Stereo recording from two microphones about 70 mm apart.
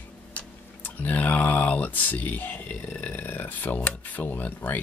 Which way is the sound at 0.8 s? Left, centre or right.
Left.